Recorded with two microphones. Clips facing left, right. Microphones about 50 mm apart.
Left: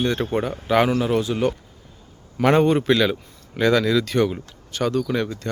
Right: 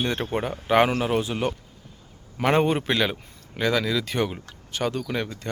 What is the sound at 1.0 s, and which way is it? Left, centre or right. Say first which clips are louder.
Speech: left 4 dB; centre.